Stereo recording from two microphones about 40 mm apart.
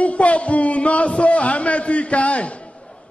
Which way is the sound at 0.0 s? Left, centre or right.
Left.